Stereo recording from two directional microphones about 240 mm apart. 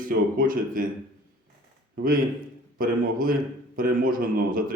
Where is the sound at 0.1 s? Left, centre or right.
Right.